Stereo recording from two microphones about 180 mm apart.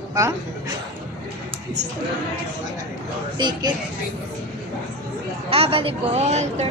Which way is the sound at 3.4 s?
25° right (ahead or behind).